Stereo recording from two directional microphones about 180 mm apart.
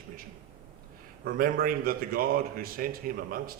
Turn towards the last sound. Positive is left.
turn(degrees=-55)  # may be behind; listen again after turning